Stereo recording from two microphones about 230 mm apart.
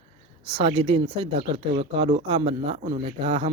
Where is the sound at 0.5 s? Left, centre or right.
Right.